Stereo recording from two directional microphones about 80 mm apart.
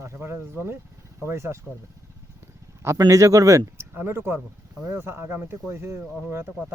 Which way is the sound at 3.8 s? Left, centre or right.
Right.